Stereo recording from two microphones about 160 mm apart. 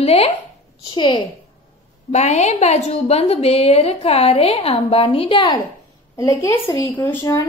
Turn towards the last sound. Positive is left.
turn(degrees=20)  # may be behind; listen again after turning